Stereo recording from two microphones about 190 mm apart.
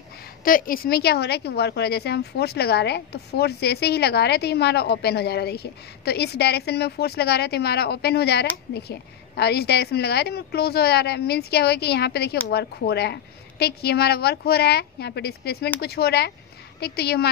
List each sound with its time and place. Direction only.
0.4 s a woman's voice: 45° left (ahead or behind)